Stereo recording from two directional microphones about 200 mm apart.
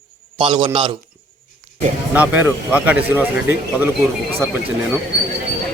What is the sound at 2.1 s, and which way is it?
Speech, 10° right (ahead or behind).